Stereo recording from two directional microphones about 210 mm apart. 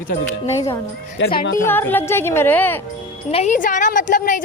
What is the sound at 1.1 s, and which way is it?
Speech, 50° left (ahead or behind).